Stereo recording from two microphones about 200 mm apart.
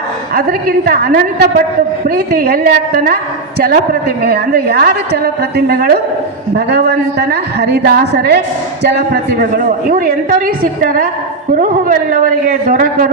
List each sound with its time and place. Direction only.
0.3 s a woman's voice: 50° right (ahead or behind)